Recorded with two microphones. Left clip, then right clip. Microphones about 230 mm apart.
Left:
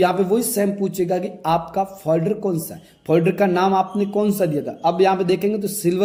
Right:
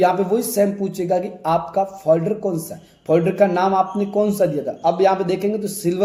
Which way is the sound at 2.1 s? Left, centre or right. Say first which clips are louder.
Right 3 dB; left.